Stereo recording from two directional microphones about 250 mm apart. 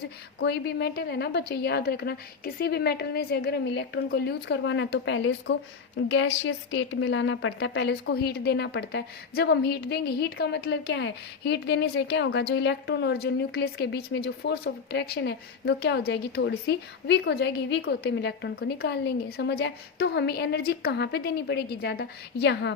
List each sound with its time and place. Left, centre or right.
0.3 s a woman's voice: left